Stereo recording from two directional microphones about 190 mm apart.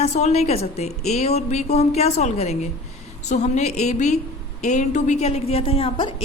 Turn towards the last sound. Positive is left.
turn(degrees=30)  # may be behind; listen again after turning